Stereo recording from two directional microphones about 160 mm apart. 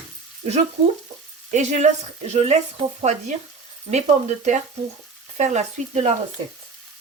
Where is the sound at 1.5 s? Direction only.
50° right (ahead or behind).